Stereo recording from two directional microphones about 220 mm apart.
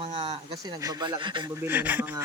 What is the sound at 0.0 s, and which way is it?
Speech, 25° right (ahead or behind).